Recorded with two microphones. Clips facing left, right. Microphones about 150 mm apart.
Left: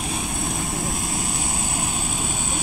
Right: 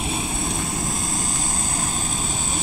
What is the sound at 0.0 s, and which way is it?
Vehicle, 5° right (ahead or behind).